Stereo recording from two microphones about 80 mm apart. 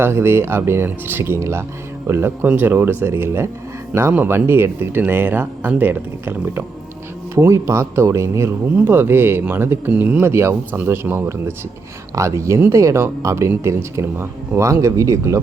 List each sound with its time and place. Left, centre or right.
0.0 s speech: right
8.7 s speech: right